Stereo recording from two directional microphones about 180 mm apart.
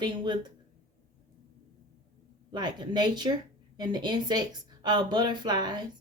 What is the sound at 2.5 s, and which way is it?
Speech, 25° right (ahead or behind).